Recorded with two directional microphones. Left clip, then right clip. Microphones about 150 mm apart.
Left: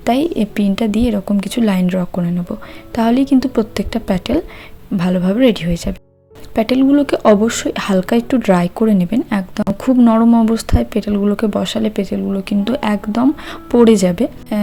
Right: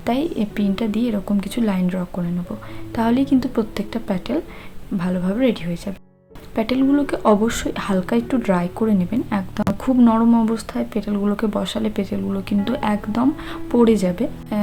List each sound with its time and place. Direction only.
0.0 s speech: 40° left (ahead or behind)